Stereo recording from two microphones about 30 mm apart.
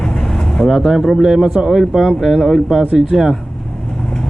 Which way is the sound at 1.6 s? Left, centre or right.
Right.